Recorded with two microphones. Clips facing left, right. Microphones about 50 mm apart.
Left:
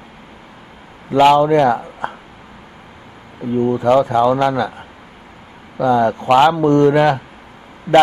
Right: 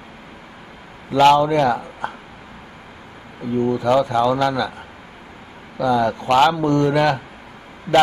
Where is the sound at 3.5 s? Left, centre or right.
Left.